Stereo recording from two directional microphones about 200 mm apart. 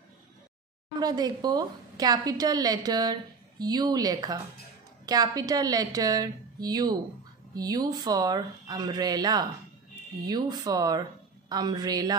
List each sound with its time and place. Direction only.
0.9 s a woman's voice: 20° right (ahead or behind)